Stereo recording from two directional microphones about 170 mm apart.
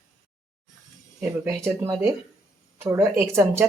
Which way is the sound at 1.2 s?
15° right (ahead or behind).